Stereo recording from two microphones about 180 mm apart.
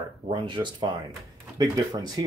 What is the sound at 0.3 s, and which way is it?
Speech, 25° right (ahead or behind).